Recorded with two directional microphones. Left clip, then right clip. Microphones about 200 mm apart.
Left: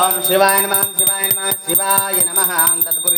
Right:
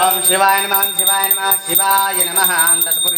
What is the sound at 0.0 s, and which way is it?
Music, 50° left (ahead or behind).